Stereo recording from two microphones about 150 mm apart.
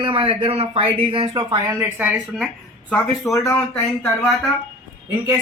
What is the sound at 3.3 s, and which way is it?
Speech, 20° left (ahead or behind).